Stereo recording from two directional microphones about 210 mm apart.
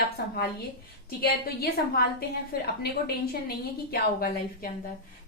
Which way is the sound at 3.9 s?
45° left (ahead or behind).